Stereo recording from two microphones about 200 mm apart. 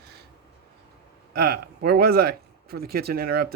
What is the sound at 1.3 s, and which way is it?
Speech, 50° right (ahead or behind).